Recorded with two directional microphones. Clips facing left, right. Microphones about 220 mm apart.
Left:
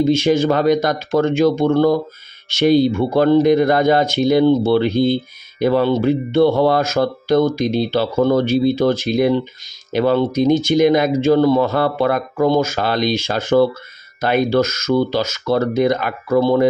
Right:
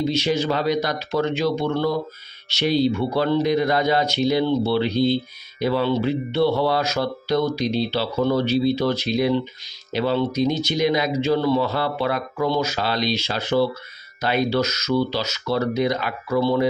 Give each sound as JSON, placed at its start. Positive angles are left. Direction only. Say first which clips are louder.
{"t": 0.0, "sound": "speech", "louder": "left 7 dB", "side_deg": 50}